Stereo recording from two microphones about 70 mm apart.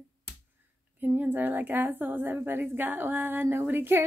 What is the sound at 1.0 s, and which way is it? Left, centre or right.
Speech, right.